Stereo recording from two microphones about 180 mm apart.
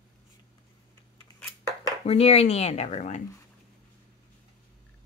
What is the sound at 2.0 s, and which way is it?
Speech, 35° left (ahead or behind).